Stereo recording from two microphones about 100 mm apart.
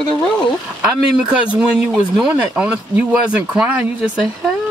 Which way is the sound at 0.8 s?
10° right (ahead or behind).